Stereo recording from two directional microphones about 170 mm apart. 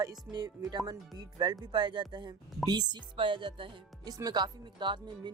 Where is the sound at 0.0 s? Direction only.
20° right (ahead or behind).